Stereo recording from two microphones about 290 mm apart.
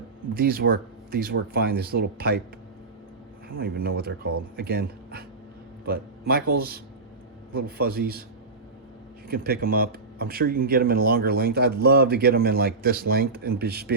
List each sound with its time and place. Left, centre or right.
0.3 s speech: right
3.5 s speech: right
9.3 s speech: right